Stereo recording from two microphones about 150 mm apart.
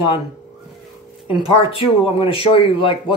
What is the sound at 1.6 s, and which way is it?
A man's voice, 40° left (ahead or behind).